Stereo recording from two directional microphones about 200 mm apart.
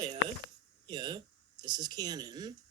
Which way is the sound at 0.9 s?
20° right (ahead or behind).